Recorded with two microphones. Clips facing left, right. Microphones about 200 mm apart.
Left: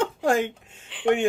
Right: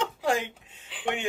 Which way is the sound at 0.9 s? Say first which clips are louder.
Even; centre (ahead or behind).